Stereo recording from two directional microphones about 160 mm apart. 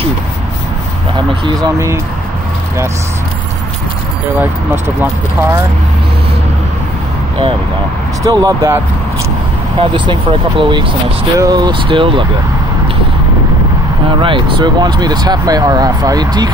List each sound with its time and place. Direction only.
1.1 s speech: 30° right (ahead or behind)
8.2 s speech: 20° right (ahead or behind)
9.8 s speech: 30° right (ahead or behind)
14.2 s speech: 30° right (ahead or behind)